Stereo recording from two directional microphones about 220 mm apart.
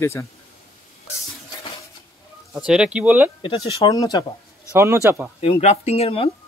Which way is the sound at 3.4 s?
20° left (ahead or behind).